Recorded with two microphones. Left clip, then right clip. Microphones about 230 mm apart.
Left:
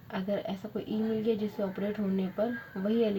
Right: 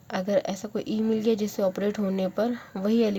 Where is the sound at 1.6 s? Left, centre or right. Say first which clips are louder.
Right 9 dB; right.